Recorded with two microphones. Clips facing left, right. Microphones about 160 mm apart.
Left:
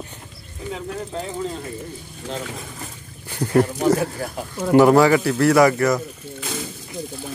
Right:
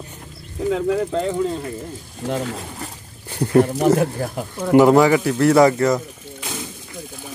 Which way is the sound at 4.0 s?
45° right (ahead or behind).